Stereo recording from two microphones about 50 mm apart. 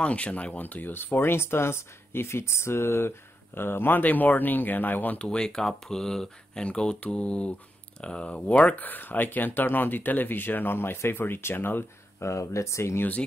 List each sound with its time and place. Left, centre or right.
0.0 s speech: left
5.2 s speech: centre; by 11.8 s left
12.2 s speech: left